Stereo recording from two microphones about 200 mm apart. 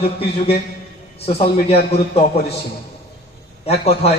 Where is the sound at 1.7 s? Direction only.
30° left (ahead or behind).